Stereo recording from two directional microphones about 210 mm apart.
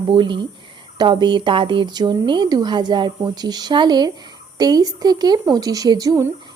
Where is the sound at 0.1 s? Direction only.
25° right (ahead or behind).